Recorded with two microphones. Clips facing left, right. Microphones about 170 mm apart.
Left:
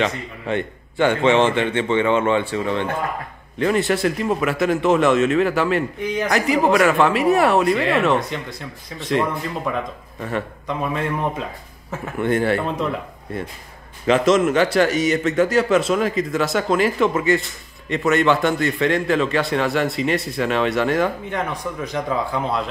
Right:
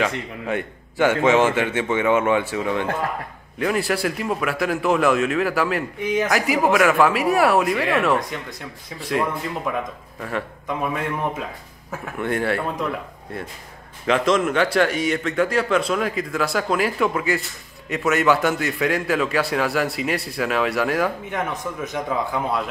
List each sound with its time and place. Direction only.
0.0 s a man's voice: 5° right (ahead or behind)
11.9 s a man's voice: centre (ahead or behind)
14.0 s a man's voice: centre (ahead or behind)